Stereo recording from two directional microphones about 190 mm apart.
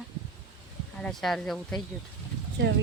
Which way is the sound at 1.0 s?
Centre (ahead or behind).